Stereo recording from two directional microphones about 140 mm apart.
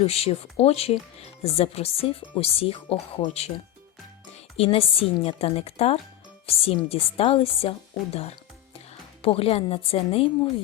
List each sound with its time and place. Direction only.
0.0 s speech: 45° left (ahead or behind)
4.5 s speech: 45° left (ahead or behind)